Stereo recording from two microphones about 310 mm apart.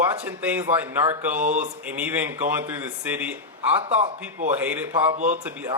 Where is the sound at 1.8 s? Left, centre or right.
Centre.